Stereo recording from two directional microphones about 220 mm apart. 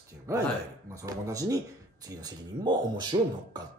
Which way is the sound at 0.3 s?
15° right (ahead or behind).